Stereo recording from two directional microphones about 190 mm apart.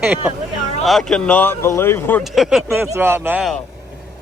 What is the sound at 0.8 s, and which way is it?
Speech, centre (ahead or behind).